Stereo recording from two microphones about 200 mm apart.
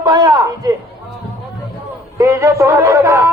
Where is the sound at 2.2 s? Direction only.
15° right (ahead or behind).